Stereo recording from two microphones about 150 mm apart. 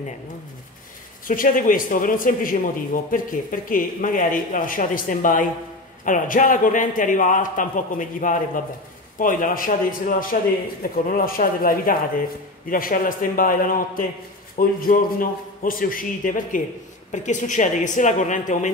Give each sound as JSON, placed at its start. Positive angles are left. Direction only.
{"t": 1.2, "sound": "a man's voice", "side_deg": 65}